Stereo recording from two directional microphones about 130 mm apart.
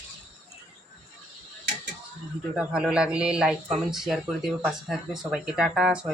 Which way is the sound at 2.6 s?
10° right (ahead or behind).